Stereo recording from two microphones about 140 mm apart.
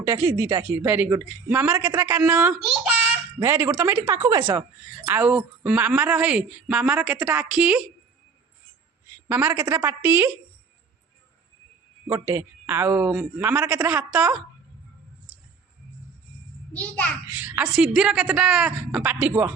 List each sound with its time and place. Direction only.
0.6 s speech: 10° right (ahead or behind)
5.0 s speech: 15° right (ahead or behind)
9.3 s speech: 15° right (ahead or behind)
12.1 s speech: 20° right (ahead or behind)
16.7 s a child's voice: 10° left (ahead or behind)
17.2 s speech: 10° right (ahead or behind)
17.7 s a woman's voice: 5° right (ahead or behind)